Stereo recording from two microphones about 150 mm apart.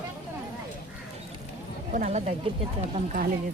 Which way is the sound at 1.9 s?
55° right (ahead or behind).